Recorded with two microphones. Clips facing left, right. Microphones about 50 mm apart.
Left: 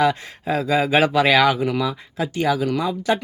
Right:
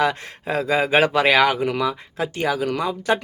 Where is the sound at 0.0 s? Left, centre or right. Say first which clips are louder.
Left 2 dB; right.